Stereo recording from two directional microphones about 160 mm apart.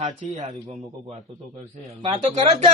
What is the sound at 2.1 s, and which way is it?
Speech, 45° right (ahead or behind).